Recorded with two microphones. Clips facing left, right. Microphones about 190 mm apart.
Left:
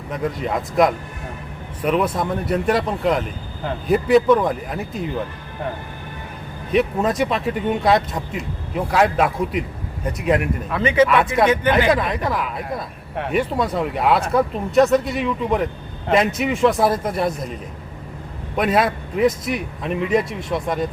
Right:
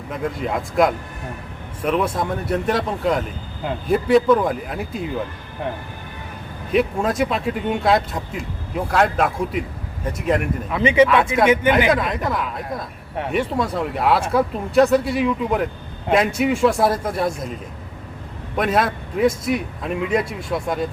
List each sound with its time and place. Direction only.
0.1 s speech: centre (ahead or behind)
6.7 s speech: centre (ahead or behind)
10.7 s speech: 15° right (ahead or behind)
11.9 s speech: centre (ahead or behind)
18.5 s speech: centre (ahead or behind)